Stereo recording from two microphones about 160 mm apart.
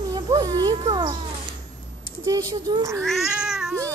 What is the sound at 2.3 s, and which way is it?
Speech, 25° right (ahead or behind).